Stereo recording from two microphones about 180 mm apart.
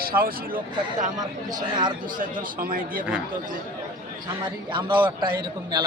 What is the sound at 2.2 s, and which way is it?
Speech, 50° right (ahead or behind).